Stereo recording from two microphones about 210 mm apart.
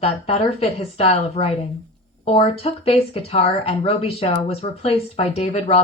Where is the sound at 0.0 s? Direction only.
25° left (ahead or behind).